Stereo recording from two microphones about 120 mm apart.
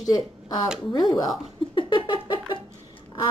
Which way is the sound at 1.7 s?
45° left (ahead or behind).